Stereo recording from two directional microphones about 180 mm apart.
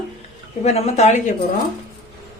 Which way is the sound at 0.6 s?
40° left (ahead or behind).